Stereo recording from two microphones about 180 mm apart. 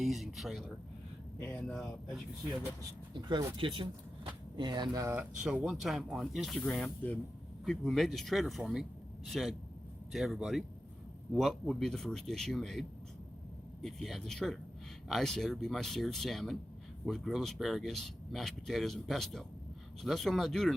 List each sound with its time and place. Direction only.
0.0 s speech: centre (ahead or behind)
3.2 s speech: 25° right (ahead or behind); by 12.8 s centre (ahead or behind)
13.8 s speech: centre (ahead or behind)